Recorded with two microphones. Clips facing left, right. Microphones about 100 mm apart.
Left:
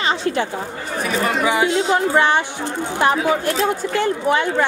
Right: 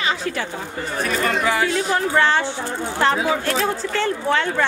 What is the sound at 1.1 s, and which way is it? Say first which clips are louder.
A woman's voice: left 2 dB; 10° left (ahead or behind).